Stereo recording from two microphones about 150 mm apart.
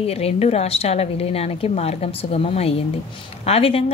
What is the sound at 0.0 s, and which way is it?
A woman's voice, 40° left (ahead or behind).